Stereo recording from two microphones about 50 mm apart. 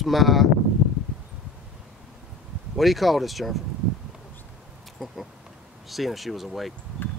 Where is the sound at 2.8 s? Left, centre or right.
Centre.